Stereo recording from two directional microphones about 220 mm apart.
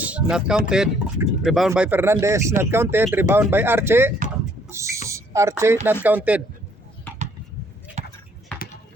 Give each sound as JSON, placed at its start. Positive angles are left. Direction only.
{"t": 0.0, "sound": "speech", "side_deg": -5}
{"t": 4.7, "sound": "a sound", "side_deg": -15}
{"t": 5.0, "sound": "speech", "side_deg": -15}
{"t": 8.0, "sound": "basketball bounce", "side_deg": -30}